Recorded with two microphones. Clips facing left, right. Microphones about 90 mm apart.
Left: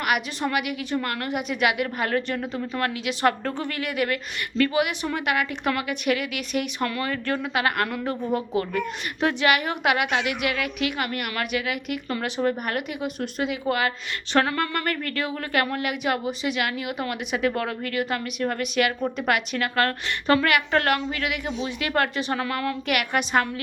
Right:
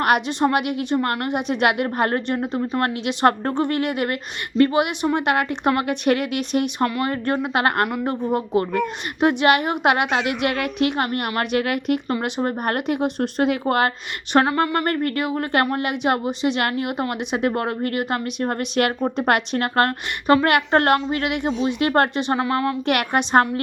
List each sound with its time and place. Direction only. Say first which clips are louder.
0.3 s speech: right 6 dB; 25° right (ahead or behind); by 2.1 s 40° right (ahead or behind)
2.1 s speech: right 3 dB; 25° right (ahead or behind)
7.0 s a woman's voice: right 5 dB; 30° right (ahead or behind)
7.9 s a woman's voice: right 4 dB; 15° right (ahead or behind)
8.3 s a woman's voice: right 4 dB; 30° right (ahead or behind)
9.2 s a woman's voice: right 5 dB; 20° right (ahead or behind)
11.5 s a woman's voice: right 9 dB; 45° right (ahead or behind)
12.0 s speech: right 3 dB; 20° right (ahead or behind)
12.5 s a woman's voice: right 4 dB; 40° right (ahead or behind)
13.4 s a woman's voice: right 5 dB; 50° right (ahead or behind)
14.3 s speech: right 5 dB; 25° right (ahead or behind)
18.9 s a woman's voice: right 4 dB; 30° right (ahead or behind)
20.2 s a woman's voice: right 4 dB; 25° right (ahead or behind); by 23.5 s 40° right (ahead or behind)